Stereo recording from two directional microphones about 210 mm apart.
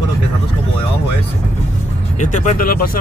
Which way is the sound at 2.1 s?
35° left (ahead or behind).